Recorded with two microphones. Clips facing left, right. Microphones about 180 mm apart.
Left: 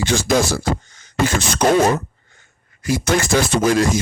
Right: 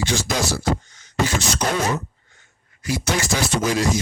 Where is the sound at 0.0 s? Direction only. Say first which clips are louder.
Left 6 dB; 55° left (ahead or behind).